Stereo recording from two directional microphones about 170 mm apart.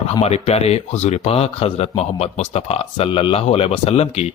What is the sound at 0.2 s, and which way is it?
Speech, 40° left (ahead or behind).